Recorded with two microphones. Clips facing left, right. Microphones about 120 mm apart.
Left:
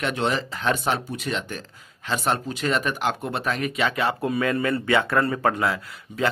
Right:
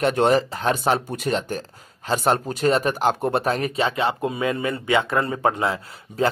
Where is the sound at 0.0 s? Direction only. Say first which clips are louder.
Right 7 dB; 45° right (ahead or behind).